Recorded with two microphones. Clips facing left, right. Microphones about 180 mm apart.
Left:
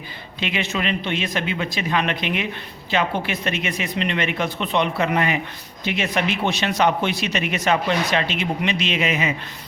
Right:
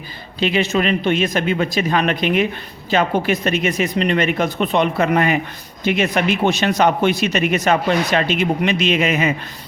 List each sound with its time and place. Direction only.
0.3 s speech: 40° right (ahead or behind)